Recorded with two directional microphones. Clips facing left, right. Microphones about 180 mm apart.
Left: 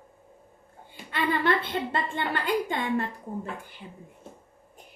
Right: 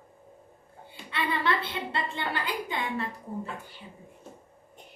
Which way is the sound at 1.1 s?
45° left (ahead or behind).